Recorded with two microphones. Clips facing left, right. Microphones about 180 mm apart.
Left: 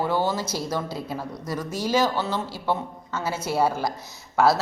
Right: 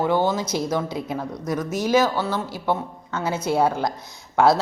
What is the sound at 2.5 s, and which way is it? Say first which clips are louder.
Speech: right 2 dB; 15° right (ahead or behind).